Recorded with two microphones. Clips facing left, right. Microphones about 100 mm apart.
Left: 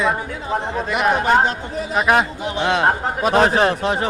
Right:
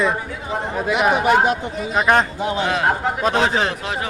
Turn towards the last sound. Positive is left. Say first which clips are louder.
# left 4 dB
turn(degrees=35)  # may be behind; listen again after turning